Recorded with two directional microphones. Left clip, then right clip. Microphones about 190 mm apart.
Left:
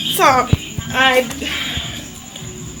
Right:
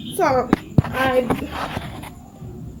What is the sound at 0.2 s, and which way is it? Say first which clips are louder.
Speech: left 5 dB; 10° right (ahead or behind).